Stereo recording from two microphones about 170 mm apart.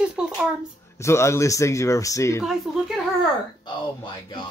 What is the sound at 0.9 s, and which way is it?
Speech, 15° left (ahead or behind).